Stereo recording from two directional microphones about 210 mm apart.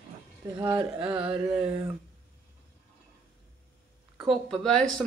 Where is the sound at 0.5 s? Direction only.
20° right (ahead or behind).